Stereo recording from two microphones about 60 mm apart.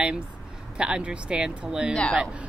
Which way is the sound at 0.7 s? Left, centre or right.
Centre.